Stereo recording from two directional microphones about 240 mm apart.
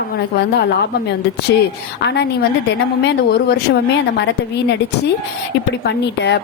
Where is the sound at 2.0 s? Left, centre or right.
Left.